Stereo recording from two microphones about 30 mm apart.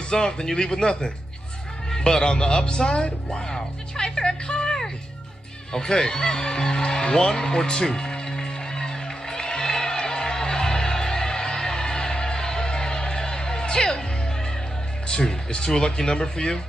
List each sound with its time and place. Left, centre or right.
0.1 s a man's voice: left
6.8 s music: left
15.0 s speech: left